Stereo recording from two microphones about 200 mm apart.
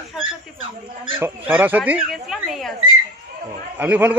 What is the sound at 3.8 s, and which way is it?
Speech, 10° right (ahead or behind).